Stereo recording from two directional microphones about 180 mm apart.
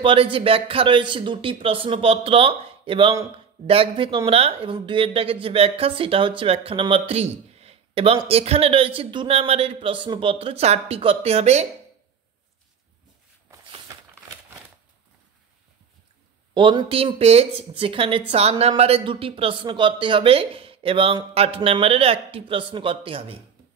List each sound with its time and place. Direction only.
0.0 s a man's voice: 30° right (ahead or behind)
16.5 s a man's voice: 25° right (ahead or behind)